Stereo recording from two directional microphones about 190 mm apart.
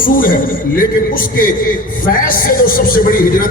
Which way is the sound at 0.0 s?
50° left (ahead or behind).